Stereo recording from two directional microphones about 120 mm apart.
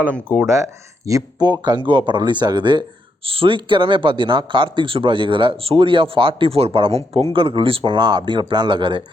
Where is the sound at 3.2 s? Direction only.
50° right (ahead or behind).